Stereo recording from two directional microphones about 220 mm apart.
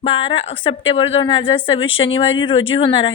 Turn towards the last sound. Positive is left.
turn(degrees=20)  # may be behind; listen again after turning